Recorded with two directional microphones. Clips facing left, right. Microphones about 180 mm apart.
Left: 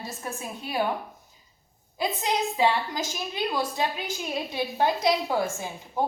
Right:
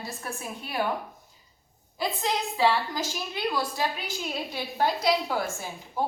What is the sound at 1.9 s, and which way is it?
A woman's voice, 20° left (ahead or behind).